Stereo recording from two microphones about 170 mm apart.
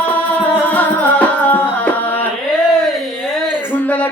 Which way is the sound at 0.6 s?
10° left (ahead or behind).